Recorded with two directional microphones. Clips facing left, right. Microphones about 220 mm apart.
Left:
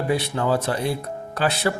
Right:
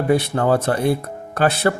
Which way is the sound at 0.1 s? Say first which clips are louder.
Right 5 dB; 55° right (ahead or behind).